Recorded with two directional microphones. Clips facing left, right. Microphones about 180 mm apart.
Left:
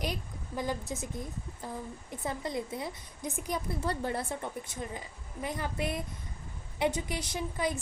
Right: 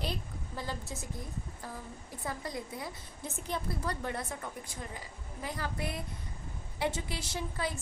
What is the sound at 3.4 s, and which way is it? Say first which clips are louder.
Speech: left 2 dB; 10° left (ahead or behind).